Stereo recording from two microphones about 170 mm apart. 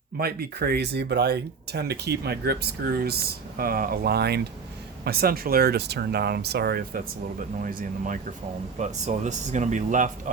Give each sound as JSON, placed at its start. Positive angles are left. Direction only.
{"t": 0.2, "sound": "speech", "side_deg": -65}